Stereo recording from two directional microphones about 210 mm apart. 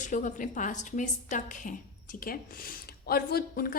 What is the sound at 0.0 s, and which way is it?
A woman's voice, 35° left (ahead or behind).